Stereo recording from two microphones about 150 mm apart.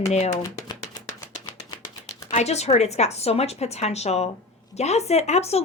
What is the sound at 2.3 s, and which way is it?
A woman's voice, 45° left (ahead or behind).